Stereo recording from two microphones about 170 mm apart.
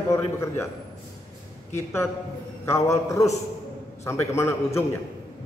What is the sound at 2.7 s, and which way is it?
A man's voice, 15° left (ahead or behind).